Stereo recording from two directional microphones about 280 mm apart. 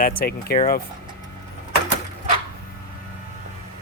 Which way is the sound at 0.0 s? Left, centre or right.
Left.